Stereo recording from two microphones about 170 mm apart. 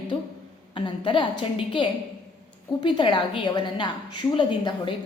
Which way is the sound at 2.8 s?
25° left (ahead or behind).